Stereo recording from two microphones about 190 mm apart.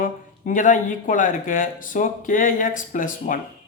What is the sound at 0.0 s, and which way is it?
Speech, 45° left (ahead or behind).